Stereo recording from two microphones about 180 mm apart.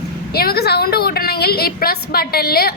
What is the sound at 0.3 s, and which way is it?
A woman's voice, 60° left (ahead or behind).